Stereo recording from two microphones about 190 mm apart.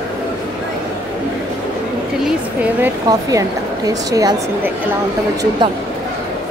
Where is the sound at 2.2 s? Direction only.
10° right (ahead or behind).